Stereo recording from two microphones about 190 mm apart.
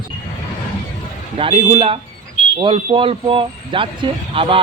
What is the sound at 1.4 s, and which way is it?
Speech, 30° right (ahead or behind).